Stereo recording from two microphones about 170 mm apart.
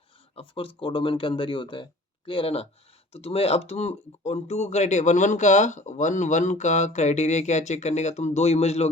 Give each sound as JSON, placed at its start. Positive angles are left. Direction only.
{"t": 0.3, "sound": "speech", "side_deg": 30}